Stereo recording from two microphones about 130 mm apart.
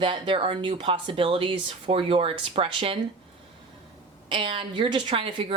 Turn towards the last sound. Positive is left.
turn(degrees=-45)  # may be behind; listen again after turning